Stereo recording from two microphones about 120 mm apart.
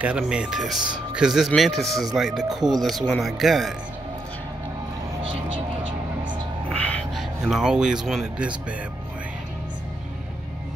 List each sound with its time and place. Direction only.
0.0 s speech: 10° right (ahead or behind)
5.2 s music: 45° right (ahead or behind)
6.7 s a sound: 10° left (ahead or behind)
7.2 s speech: 5° right (ahead or behind)